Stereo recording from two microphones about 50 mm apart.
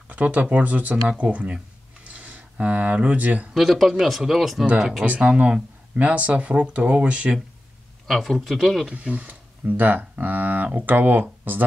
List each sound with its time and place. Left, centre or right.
0.1 s speech: right
2.0 s a sound: right
3.5 s speech: centre
5.0 s speech: right
8.1 s speech: centre
8.9 s speech: right